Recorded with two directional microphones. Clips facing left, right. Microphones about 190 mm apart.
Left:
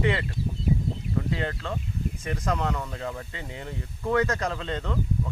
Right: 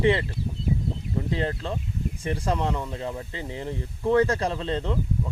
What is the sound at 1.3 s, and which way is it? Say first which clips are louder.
Speech: right 2 dB; 30° right (ahead or behind).